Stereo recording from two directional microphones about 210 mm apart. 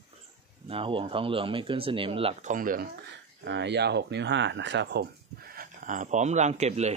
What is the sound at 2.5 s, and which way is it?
Speech, 40° right (ahead or behind).